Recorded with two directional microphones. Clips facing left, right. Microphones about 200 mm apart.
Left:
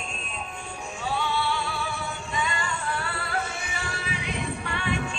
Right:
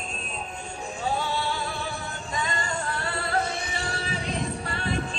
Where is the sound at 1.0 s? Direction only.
40° right (ahead or behind).